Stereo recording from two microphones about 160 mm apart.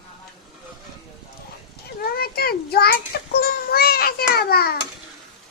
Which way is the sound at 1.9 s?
70° left (ahead or behind).